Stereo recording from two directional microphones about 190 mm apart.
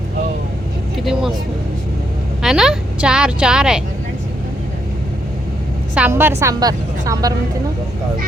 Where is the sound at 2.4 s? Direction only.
Centre (ahead or behind).